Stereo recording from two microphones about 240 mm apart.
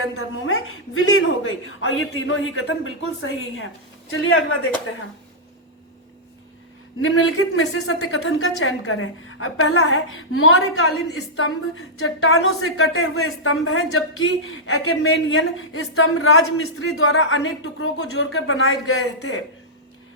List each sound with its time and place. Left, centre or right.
0.0 s a woman's voice: left
7.0 s a woman's voice: left
11.9 s a woman's voice: left